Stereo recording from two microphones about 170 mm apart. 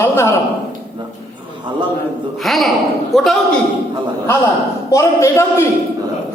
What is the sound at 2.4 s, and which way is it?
Speech, centre (ahead or behind).